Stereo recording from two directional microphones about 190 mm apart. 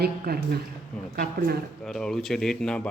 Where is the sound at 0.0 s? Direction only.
55° right (ahead or behind).